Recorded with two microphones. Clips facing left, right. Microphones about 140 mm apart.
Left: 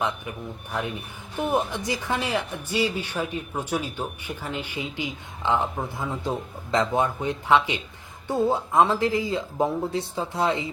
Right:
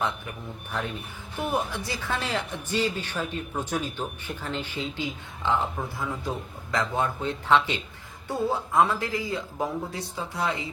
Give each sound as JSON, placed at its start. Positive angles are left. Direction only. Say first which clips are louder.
{"t": 0.7, "sound": "speech", "louder": "left 2 dB", "side_deg": 15}